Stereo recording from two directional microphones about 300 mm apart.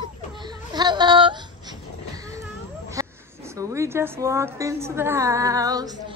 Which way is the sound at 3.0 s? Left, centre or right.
Centre.